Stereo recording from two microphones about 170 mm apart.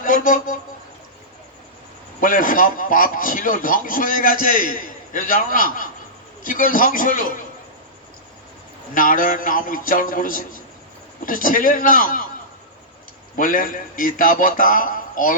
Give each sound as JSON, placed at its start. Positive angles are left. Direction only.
{"t": 0.0, "sound": "speech", "side_deg": 55}
{"t": 2.2, "sound": "a man's voice", "side_deg": 55}
{"t": 9.0, "sound": "a man's voice", "side_deg": 55}
{"t": 13.3, "sound": "a man's voice", "side_deg": 50}